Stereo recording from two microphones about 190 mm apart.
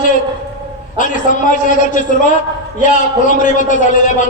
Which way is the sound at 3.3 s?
45° left (ahead or behind).